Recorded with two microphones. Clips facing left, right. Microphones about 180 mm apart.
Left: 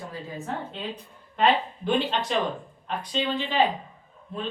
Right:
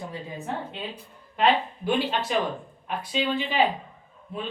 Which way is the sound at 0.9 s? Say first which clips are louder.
Left 3 dB; 5° right (ahead or behind).